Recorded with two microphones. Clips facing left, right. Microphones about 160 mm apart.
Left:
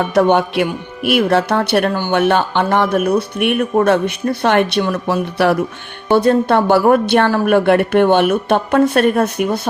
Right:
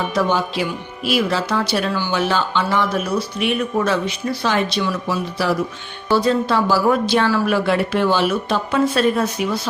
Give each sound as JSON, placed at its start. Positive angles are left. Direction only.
{"t": 0.1, "sound": "speech", "side_deg": 65}